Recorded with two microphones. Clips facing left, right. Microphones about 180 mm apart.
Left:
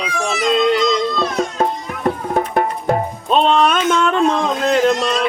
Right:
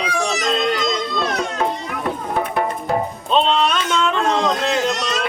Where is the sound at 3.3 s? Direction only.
45° left (ahead or behind).